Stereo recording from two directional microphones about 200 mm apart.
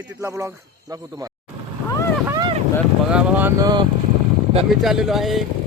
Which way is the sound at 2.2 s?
15° right (ahead or behind).